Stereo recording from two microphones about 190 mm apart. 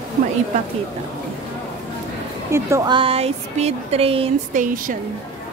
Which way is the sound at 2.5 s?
15° right (ahead or behind).